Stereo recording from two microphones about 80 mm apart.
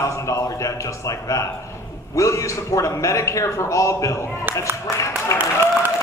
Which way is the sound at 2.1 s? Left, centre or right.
Left.